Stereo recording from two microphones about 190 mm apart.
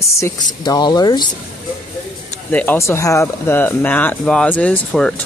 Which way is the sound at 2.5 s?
10° left (ahead or behind).